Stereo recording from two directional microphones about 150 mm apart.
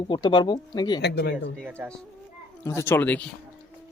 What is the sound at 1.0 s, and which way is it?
Speech, 90° left.